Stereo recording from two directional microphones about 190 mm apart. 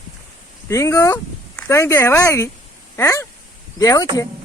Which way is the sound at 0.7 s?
15° left (ahead or behind).